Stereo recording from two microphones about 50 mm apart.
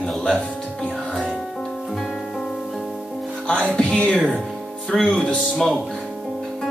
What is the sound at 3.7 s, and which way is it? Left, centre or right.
Speech, centre.